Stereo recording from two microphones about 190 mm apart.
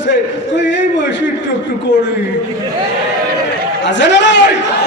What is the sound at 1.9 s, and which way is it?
Speech, 70° left (ahead or behind).